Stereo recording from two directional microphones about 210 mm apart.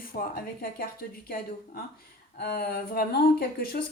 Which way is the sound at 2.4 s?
45° left (ahead or behind).